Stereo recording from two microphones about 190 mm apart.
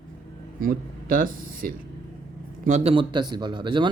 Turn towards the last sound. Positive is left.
turn(degrees=-25)  # may be behind; listen again after turning